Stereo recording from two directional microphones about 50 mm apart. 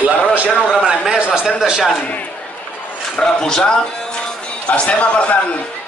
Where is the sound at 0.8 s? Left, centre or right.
Centre.